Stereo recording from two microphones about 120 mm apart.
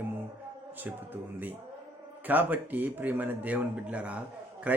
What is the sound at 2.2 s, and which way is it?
Speech, 15° right (ahead or behind).